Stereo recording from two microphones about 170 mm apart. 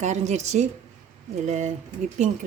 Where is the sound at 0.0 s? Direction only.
45° right (ahead or behind).